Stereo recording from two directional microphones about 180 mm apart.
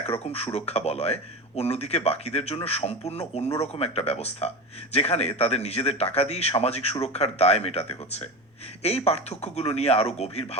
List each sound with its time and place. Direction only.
0.0 s speech: 35° left (ahead or behind)